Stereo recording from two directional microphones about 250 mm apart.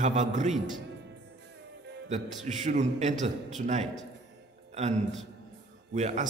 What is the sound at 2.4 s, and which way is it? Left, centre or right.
A man's voice, right.